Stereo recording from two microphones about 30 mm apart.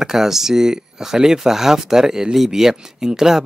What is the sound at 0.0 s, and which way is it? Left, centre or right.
Speech, centre.